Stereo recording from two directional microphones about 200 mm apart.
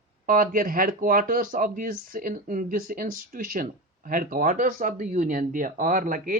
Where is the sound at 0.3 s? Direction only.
45° right (ahead or behind).